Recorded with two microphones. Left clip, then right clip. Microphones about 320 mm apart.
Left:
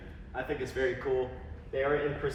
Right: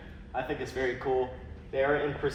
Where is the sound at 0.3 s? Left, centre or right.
Centre.